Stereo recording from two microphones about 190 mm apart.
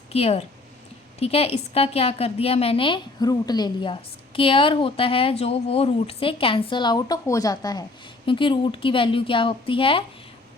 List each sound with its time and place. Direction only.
0.1 s a woman's voice: 30° left (ahead or behind)